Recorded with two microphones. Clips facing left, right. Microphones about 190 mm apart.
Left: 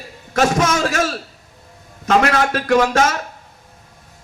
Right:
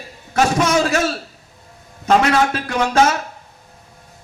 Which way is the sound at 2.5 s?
45° left (ahead or behind).